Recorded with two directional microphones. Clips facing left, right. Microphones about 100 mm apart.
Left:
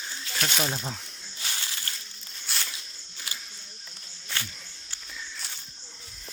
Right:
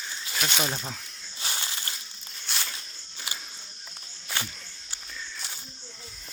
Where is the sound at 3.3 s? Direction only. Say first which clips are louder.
Right 2 dB; 20° right (ahead or behind).